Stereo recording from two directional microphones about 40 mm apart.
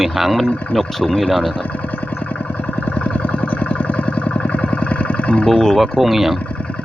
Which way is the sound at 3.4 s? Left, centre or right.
Left.